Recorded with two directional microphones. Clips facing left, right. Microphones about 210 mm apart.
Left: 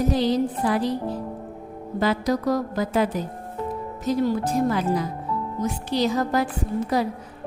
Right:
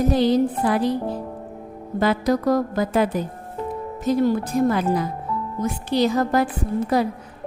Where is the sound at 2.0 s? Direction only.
55° right (ahead or behind).